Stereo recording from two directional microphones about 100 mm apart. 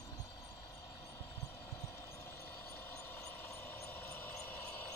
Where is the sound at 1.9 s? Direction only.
25° left (ahead or behind).